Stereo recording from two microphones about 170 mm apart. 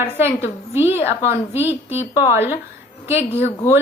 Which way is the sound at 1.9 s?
40° left (ahead or behind).